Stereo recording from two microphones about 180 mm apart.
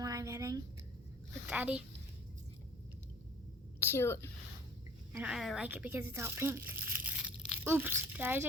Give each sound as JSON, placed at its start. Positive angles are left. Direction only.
{"t": 0.0, "sound": "a sound", "side_deg": -20}
{"t": 1.5, "sound": "a child's voice", "side_deg": -5}
{"t": 3.8, "sound": "a woman's voice", "side_deg": 15}
{"t": 5.1, "sound": "speech", "side_deg": -5}